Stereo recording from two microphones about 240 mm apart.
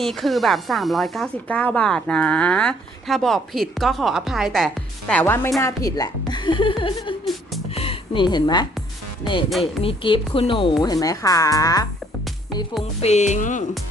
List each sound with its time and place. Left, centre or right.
0.0 s speech: centre; by 7.2 s left
7.7 s music: left
9.5 s speech: centre
9.8 s speech: left
13.0 s music: left